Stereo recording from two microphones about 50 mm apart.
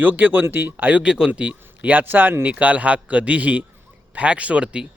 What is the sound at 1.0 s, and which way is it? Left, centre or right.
Speech, centre.